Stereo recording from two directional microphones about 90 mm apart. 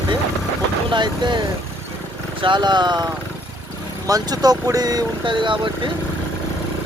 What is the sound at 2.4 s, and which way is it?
Speech, 60° right (ahead or behind).